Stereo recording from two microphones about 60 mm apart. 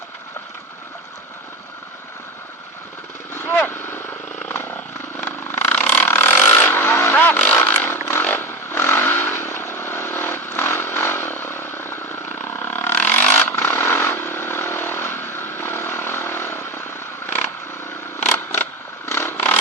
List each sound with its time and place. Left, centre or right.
3.3 s vehicle: left
7.5 s chainsaw: left
8.2 s motorcycle: left
12.5 s vehicle: left
13.5 s vehicle: left
18.3 s a sound: left